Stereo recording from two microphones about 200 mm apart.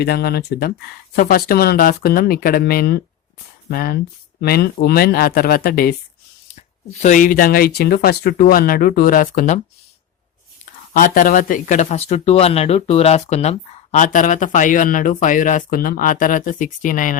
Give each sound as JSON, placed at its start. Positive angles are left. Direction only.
{"t": 0.0, "sound": "speech", "side_deg": 55}
{"t": 6.5, "sound": "speech", "side_deg": 35}
{"t": 10.9, "sound": "speech", "side_deg": 45}